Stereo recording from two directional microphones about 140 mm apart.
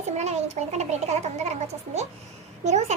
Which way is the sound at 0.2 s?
55° right (ahead or behind).